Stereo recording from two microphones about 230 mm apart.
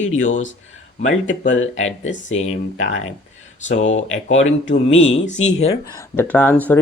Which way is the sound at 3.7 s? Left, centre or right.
Left.